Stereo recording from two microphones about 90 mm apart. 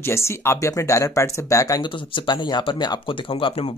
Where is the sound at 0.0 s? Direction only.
30° left (ahead or behind).